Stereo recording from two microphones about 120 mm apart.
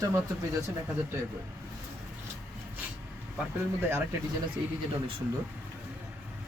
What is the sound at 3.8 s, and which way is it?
Speech, 20° right (ahead or behind).